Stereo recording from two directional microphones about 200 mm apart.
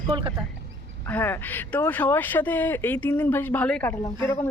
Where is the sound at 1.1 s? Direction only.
10° left (ahead or behind).